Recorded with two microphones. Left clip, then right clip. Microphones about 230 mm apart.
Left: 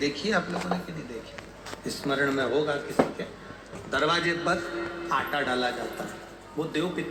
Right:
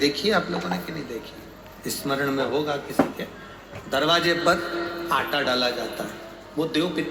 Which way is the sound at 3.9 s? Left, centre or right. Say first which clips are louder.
Right 4 dB; right.